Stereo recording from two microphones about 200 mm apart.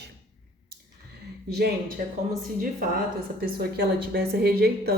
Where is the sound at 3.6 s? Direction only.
50° right (ahead or behind).